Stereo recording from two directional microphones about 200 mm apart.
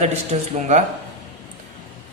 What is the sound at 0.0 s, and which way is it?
Speech, 35° right (ahead or behind).